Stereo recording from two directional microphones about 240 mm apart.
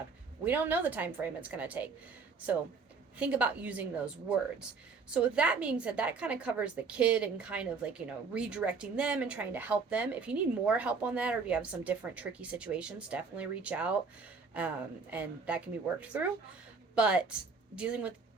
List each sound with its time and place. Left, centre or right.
0.4 s a woman's voice: centre
3.2 s a woman's voice: centre